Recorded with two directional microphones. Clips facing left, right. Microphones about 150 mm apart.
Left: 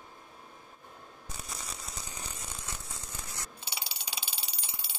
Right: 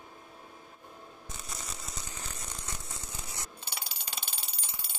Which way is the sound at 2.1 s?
10° left (ahead or behind).